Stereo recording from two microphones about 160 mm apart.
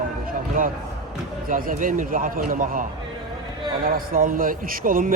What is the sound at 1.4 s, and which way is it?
A man's voice, 60° right (ahead or behind).